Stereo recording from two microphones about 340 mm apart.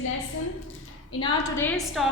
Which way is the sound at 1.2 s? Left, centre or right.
Centre.